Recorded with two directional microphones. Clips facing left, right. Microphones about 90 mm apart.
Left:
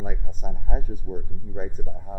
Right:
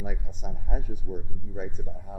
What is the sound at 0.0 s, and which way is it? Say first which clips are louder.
Speech: left 3 dB; 40° left (ahead or behind).